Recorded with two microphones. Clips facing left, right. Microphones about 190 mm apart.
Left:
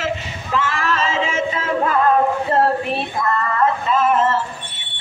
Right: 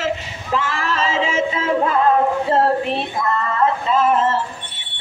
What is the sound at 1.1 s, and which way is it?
Music, 25° right (ahead or behind).